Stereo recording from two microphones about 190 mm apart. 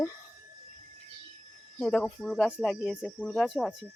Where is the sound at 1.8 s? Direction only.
5° left (ahead or behind).